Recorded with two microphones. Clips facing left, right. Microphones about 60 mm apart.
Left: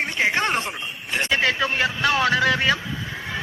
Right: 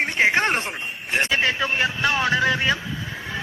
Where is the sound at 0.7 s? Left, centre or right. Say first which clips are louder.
Right 2 dB; right.